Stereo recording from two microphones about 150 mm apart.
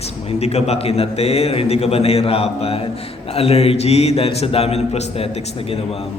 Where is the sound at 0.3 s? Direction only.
45° left (ahead or behind).